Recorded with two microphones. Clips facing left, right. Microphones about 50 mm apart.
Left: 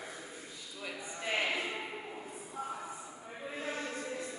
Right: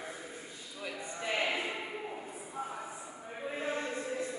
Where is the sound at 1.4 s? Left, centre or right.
Right.